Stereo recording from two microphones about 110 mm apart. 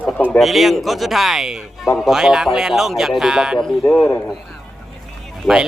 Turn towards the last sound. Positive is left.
turn(degrees=-5)  # may be behind; listen again after turning